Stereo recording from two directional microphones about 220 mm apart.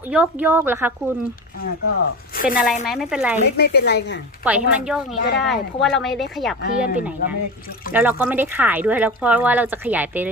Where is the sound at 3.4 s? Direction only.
45° left (ahead or behind).